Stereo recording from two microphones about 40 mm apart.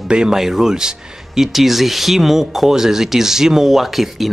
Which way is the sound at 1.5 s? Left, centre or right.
Centre.